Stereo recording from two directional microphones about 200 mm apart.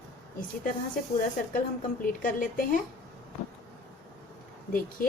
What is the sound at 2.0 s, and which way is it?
Speech, 45° left (ahead or behind).